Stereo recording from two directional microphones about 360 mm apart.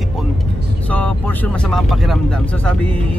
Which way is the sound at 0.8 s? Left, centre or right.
Centre.